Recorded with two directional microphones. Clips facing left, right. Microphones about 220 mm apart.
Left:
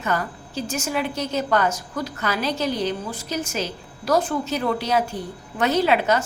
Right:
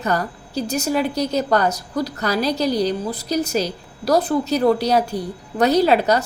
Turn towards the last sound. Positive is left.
turn(degrees=-35)  # may be behind; listen again after turning